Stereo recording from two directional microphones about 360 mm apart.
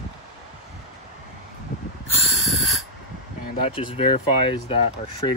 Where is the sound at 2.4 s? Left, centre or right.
Centre.